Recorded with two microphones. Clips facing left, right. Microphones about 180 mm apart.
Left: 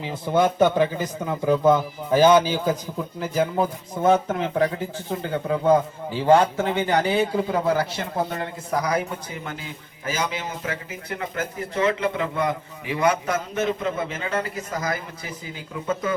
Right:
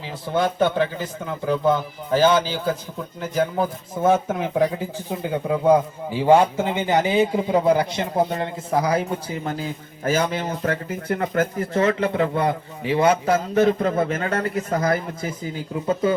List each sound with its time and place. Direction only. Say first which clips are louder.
0.0 s a man's voice: left 2 dB; 20° left (ahead or behind)
3.2 s a man's voice: right 1 dB; 5° left (ahead or behind)
4.0 s a man's voice: even; 10° right (ahead or behind); by 10.1 s 35° right (ahead or behind)
10.1 s speech: right 6 dB; 50° right (ahead or behind); by 16.1 s 30° right (ahead or behind)